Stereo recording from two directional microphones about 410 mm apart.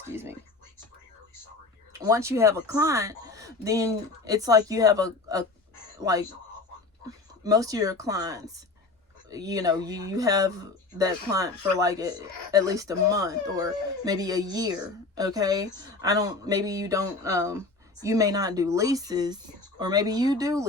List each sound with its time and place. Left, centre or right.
0.0 s speech: centre
1.9 s speech: centre
7.4 s speech: centre